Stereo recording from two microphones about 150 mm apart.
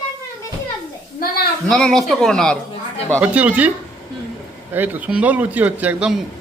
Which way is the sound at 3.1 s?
10° right (ahead or behind).